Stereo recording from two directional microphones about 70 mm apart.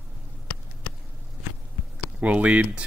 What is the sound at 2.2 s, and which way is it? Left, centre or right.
Speech, centre.